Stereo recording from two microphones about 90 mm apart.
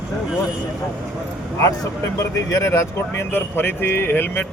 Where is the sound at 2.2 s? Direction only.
35° left (ahead or behind).